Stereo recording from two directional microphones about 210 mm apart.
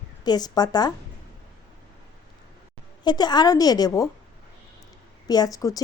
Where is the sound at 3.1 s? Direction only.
20° left (ahead or behind).